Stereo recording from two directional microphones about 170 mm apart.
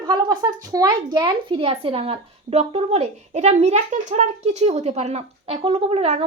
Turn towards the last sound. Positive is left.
turn(degrees=-35)  # may be behind; listen again after turning